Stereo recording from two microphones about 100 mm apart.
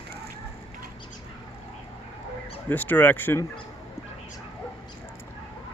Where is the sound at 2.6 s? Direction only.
20° left (ahead or behind).